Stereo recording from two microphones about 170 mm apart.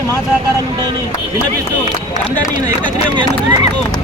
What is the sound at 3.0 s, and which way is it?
Speech, 25° right (ahead or behind).